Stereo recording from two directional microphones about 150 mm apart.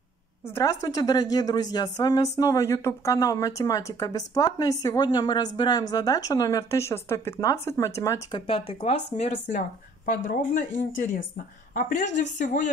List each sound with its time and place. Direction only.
0.6 s speech: 20° left (ahead or behind); by 9.6 s 50° left (ahead or behind)
10.0 s speech: 65° left (ahead or behind)